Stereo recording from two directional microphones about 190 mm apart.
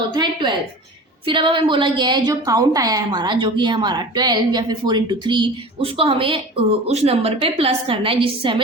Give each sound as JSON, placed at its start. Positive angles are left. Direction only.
{"t": 0.1, "sound": "a woman's voice", "side_deg": -25}